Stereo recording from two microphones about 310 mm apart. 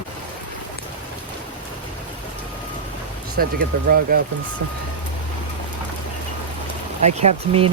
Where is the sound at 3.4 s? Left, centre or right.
Right.